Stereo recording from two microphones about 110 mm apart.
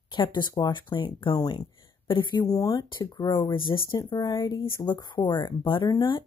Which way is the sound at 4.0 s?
40° left (ahead or behind).